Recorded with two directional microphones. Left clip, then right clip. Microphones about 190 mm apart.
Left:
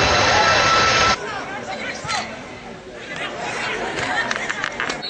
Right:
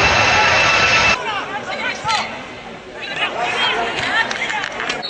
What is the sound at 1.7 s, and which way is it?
Chatter, 15° right (ahead or behind).